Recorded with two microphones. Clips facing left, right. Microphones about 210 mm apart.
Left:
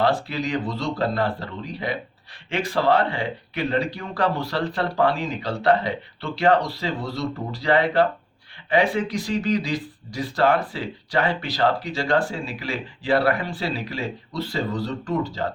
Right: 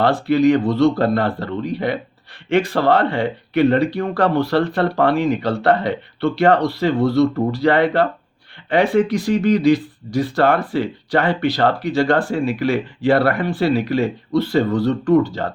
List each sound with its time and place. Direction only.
0.0 s speech: 60° right (ahead or behind)